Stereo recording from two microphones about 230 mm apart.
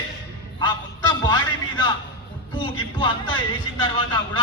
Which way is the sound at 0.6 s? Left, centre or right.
Centre.